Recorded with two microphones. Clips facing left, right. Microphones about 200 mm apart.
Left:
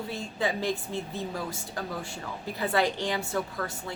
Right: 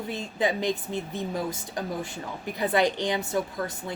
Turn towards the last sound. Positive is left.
turn(degrees=-15)  # may be behind; listen again after turning